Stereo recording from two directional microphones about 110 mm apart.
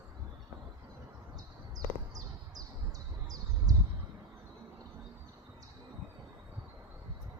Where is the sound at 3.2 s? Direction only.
35° right (ahead or behind).